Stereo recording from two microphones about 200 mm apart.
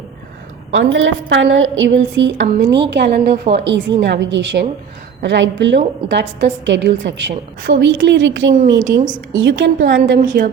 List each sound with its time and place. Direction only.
0.7 s a woman's voice: 70° right (ahead or behind)
9.0 s a woman's voice: 40° right (ahead or behind)
9.3 s a woman's voice: 70° right (ahead or behind)
10.0 s a woman's voice: 40° right (ahead or behind)